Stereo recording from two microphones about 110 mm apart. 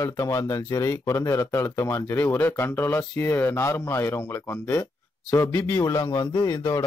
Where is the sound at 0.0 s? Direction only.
30° left (ahead or behind).